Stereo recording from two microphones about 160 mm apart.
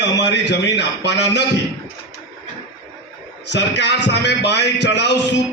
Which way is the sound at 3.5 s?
90° left.